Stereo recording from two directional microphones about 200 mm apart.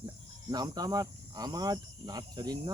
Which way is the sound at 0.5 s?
20° right (ahead or behind).